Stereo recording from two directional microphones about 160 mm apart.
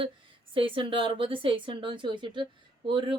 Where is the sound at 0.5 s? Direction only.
35° right (ahead or behind).